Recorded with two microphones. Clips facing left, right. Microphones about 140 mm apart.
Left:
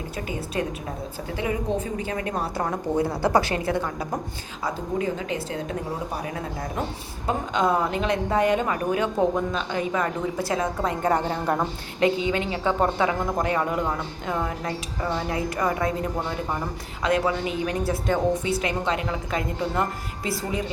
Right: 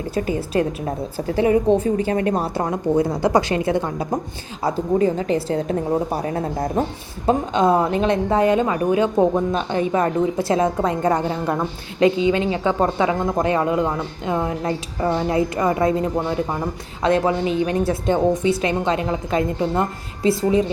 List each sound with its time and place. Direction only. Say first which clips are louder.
1.4 s a woman's voice: right 10 dB; 35° right (ahead or behind)
2.6 s speech: right 6 dB; 20° right (ahead or behind)
4.6 s a woman's voice: right 8 dB; 35° right (ahead or behind)
7.3 s speech: right 6 dB; 25° right (ahead or behind)
17.0 s speech: right 5 dB; 25° right (ahead or behind)